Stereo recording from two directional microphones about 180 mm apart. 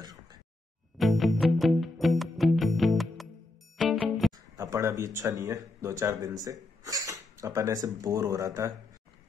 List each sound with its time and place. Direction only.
0.0 s a sound: 20° right (ahead or behind)
0.9 s music: centre (ahead or behind)
4.6 s speech: 15° right (ahead or behind)